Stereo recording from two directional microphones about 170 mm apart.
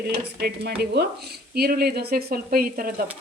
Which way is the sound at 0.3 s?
70° right (ahead or behind).